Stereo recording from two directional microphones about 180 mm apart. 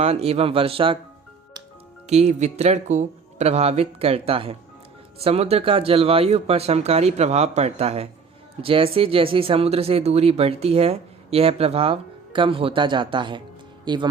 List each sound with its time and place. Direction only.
0.0 s speech: 35° right (ahead or behind)
2.0 s speech: 35° right (ahead or behind)